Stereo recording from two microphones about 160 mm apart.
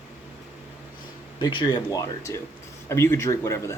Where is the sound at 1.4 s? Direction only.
25° left (ahead or behind).